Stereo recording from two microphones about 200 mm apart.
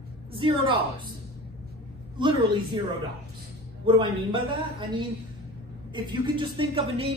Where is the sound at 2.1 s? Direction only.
25° right (ahead or behind).